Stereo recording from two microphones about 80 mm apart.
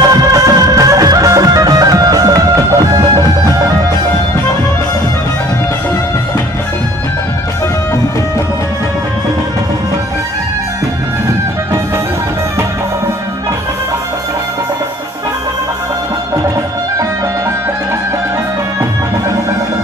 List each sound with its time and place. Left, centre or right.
0.0 s music: right